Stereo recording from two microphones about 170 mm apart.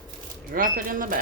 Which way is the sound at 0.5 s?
55° right (ahead or behind).